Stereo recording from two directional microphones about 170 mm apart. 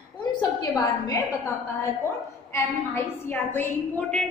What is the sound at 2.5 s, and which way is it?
A woman's voice, 15° left (ahead or behind).